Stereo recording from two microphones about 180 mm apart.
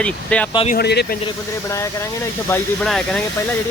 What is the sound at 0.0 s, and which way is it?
Speech, 5° left (ahead or behind).